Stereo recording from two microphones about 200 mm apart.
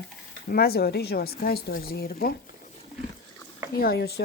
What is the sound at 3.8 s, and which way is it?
Speech, 50° left (ahead or behind).